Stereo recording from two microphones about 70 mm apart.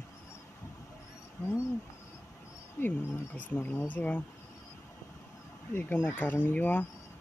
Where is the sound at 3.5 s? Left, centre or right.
Left.